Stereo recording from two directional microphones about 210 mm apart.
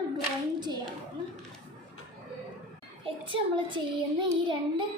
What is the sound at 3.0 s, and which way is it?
Speech, 25° right (ahead or behind).